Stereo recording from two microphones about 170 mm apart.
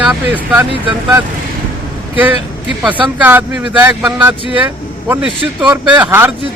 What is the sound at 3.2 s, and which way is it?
Speech, 10° right (ahead or behind).